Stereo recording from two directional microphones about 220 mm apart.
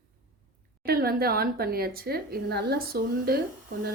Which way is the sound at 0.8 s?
45° right (ahead or behind).